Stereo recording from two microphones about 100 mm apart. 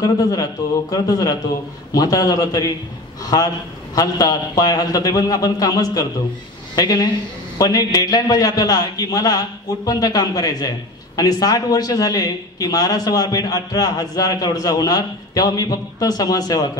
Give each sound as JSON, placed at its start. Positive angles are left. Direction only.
{"t": 0.0, "sound": "a man's voice", "side_deg": 40}